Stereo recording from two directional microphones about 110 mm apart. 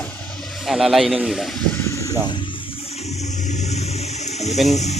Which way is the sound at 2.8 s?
70° left (ahead or behind).